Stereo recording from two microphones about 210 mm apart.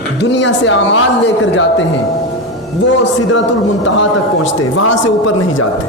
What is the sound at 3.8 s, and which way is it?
A man's voice, 65° left (ahead or behind).